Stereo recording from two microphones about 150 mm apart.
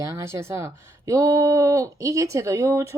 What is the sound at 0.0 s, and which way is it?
Speech, 20° right (ahead or behind).